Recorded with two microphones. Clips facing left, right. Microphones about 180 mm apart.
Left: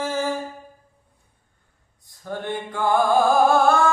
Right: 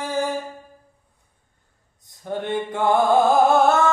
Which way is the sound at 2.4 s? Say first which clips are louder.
Right 3 dB; 20° right (ahead or behind).